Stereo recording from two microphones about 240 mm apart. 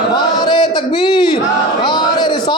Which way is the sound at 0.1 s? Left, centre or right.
Centre.